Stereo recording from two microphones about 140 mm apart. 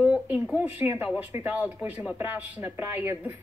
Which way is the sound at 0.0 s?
5° right (ahead or behind).